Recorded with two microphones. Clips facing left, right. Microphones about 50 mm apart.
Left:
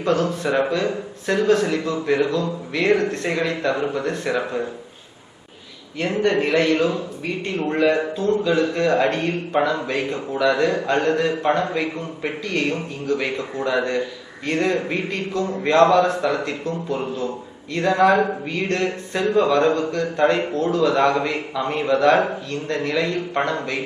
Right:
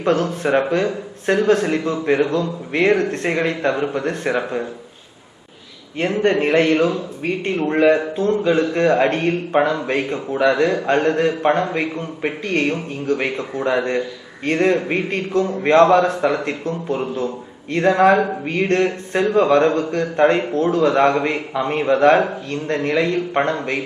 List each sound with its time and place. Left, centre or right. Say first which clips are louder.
0.0 s a man's voice: right 2 dB; right
6.0 s a man's voice: right 2 dB; right
8.1 s a sound: right 2 dB; right
8.7 s a man's voice: right 3 dB; right